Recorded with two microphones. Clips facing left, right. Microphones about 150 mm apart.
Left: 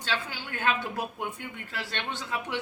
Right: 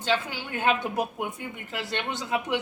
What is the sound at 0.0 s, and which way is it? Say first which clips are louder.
A woman's voice: right 6 dB; 20° right (ahead or behind).